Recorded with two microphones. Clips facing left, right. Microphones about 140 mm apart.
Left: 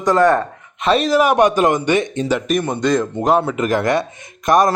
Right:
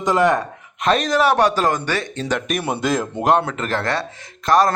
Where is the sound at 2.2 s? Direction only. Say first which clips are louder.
Left 4 dB; 10° left (ahead or behind).